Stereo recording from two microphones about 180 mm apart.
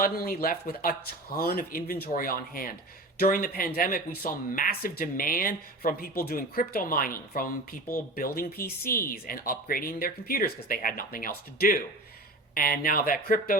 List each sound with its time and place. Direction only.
0.0 s speech: 50° left (ahead or behind)